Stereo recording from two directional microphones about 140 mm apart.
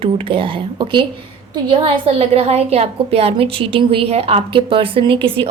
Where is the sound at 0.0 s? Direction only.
40° right (ahead or behind).